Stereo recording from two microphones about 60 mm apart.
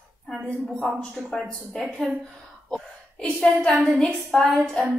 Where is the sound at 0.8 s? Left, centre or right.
Centre.